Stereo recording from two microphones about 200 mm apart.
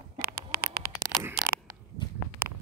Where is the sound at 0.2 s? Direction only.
45° right (ahead or behind).